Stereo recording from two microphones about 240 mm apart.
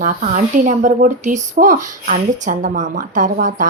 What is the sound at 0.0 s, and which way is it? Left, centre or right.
Speech, right.